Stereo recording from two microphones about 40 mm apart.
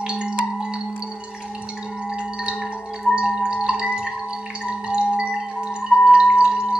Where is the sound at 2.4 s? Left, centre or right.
Right.